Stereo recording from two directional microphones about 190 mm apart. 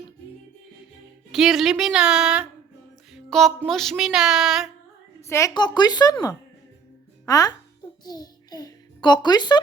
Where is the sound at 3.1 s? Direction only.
Centre (ahead or behind).